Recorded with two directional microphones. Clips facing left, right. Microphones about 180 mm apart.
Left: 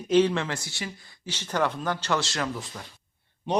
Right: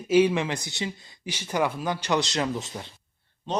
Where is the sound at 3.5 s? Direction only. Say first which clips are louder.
Left 3 dB; 10° left (ahead or behind).